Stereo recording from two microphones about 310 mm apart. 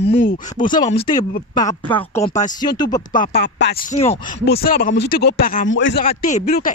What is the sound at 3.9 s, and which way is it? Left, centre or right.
Speech, left.